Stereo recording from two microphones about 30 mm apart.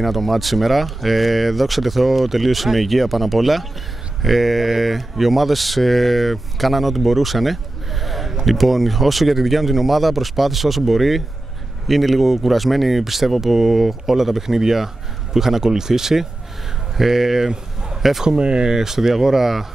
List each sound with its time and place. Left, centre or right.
0.0 s speech: centre
18.4 s speech: right
18.7 s speech: centre